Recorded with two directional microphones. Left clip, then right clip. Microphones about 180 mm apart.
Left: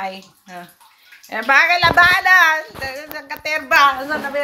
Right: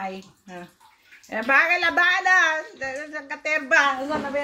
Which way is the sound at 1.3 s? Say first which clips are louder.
Left 5 dB; 15° right (ahead or behind).